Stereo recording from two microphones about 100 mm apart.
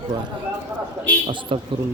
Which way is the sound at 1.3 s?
60° right (ahead or behind).